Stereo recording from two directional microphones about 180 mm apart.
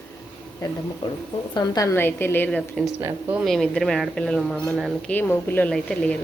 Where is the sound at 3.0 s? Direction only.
10° right (ahead or behind).